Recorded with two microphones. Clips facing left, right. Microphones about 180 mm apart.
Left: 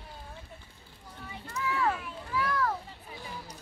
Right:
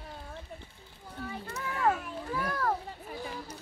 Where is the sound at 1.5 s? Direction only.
50° right (ahead or behind).